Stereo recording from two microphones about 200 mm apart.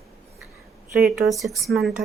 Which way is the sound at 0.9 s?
5° right (ahead or behind).